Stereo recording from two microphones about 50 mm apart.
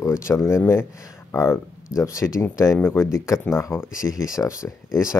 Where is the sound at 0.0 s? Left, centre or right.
Left.